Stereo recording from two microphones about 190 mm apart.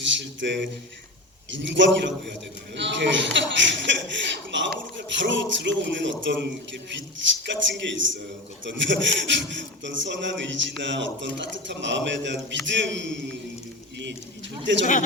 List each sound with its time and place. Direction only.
0.0 s speech: 70° right (ahead or behind)
14.6 s speech: 70° right (ahead or behind)